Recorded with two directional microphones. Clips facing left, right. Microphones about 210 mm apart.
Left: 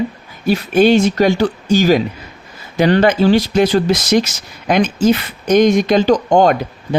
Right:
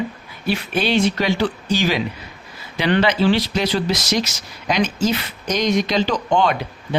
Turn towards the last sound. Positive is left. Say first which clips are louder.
# left 7 dB
turn(degrees=45)  # may be behind; listen again after turning